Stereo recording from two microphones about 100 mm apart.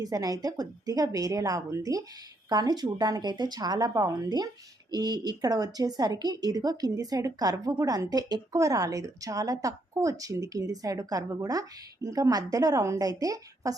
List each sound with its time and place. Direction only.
0.0 s a woman's voice: 40° right (ahead or behind)